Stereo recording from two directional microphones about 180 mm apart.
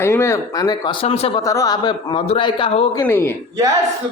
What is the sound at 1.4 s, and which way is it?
A man's voice, 20° left (ahead or behind).